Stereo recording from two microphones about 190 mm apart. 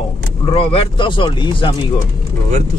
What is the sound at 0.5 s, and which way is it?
Speech, 30° left (ahead or behind).